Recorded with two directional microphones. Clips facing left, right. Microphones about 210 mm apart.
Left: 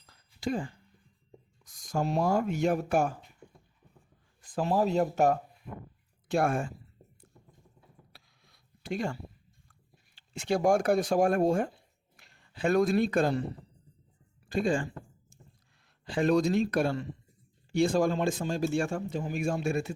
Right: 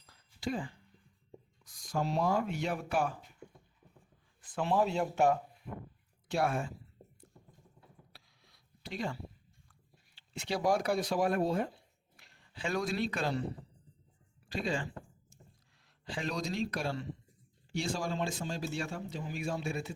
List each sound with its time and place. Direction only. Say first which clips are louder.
0.3 s speech: left 4 dB; 45° left (ahead or behind)
4.4 s speech: left 3 dB; 40° left (ahead or behind)
8.1 s a sound: left 1 dB; 50° left (ahead or behind)
10.2 s speech: left 7 dB; 45° left (ahead or behind)
14.5 s speech: left 7 dB; 50° left (ahead or behind)
16.1 s speech: left 11 dB; 55° left (ahead or behind)